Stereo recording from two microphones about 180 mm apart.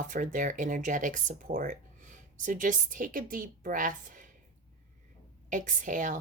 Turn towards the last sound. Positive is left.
turn(degrees=-45)  # may be behind; listen again after turning